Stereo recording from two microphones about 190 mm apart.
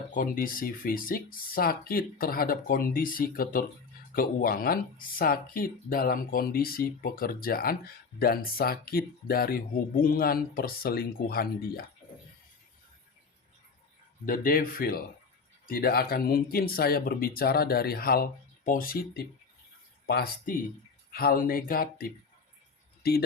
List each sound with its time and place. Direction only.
0.1 s speech: 45° left (ahead or behind)
14.3 s speech: 50° left (ahead or behind)